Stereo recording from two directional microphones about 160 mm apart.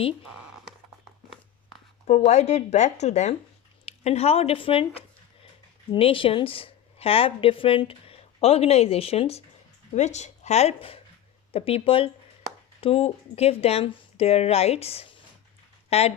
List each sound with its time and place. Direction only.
2.0 s speech: 45° left (ahead or behind)
5.9 s a woman's voice: 35° left (ahead or behind)